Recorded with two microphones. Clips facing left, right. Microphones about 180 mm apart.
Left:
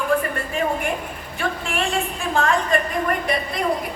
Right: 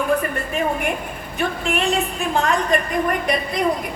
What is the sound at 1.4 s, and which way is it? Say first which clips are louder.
A woman's voice: right 3 dB; 20° right (ahead or behind).